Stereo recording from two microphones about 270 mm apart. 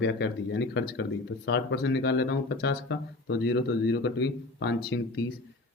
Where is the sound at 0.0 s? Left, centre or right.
Left.